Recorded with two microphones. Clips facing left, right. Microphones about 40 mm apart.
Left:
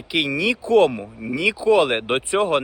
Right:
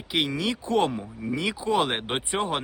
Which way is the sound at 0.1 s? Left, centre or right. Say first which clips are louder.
Left 5 dB; left.